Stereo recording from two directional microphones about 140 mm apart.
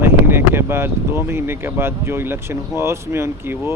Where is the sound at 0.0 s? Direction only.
15° right (ahead or behind).